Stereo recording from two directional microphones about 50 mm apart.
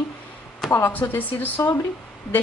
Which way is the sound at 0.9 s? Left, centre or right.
Left.